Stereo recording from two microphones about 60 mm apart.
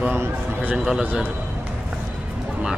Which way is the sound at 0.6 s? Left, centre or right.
Right.